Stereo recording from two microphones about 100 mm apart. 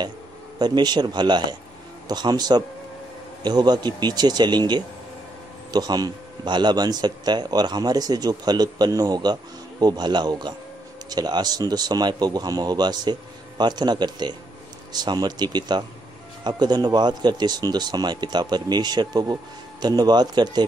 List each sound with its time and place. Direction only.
0.6 s speech: 45° right (ahead or behind)